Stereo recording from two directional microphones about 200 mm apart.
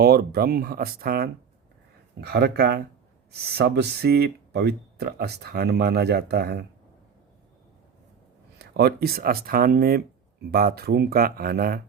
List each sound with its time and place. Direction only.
0.0 s speech: 50° right (ahead or behind)
8.5 s speech: 55° right (ahead or behind)